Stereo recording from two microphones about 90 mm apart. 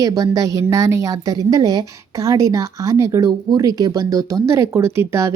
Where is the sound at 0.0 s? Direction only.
40° right (ahead or behind).